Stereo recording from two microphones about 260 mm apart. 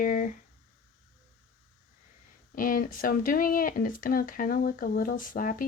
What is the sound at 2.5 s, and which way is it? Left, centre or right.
Speech, left.